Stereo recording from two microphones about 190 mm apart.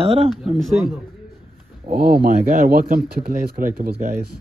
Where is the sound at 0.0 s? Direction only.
30° right (ahead or behind).